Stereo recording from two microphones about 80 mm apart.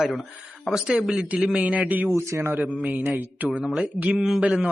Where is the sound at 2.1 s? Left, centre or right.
Right.